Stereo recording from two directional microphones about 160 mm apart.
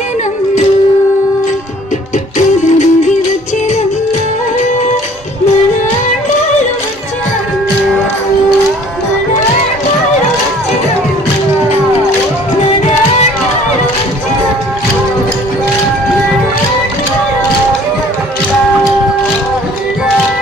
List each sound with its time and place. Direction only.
2.3 s music: 50° left (ahead or behind)